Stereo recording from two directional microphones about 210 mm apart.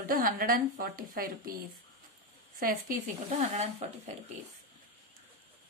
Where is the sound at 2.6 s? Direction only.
40° right (ahead or behind).